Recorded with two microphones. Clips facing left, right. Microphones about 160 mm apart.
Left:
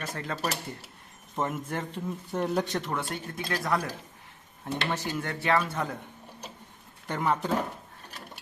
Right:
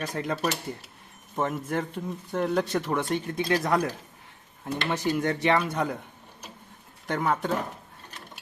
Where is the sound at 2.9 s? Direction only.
20° right (ahead or behind).